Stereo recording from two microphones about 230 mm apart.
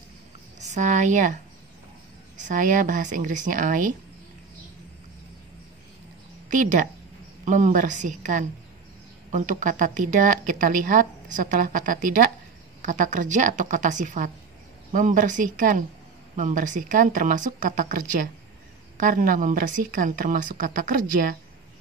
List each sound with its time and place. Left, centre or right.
0.6 s a woman's voice: right
6.5 s a woman's voice: right